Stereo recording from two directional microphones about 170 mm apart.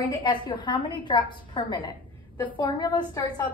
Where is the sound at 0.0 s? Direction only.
25° left (ahead or behind).